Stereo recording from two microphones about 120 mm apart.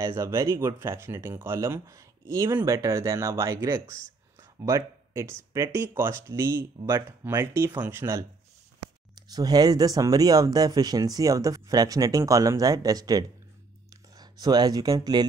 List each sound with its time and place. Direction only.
0.0 s speech: 25° right (ahead or behind)
4.4 s a sound: 25° right (ahead or behind)
5.5 s speech: 25° right (ahead or behind)
9.3 s speech: 35° right (ahead or behind)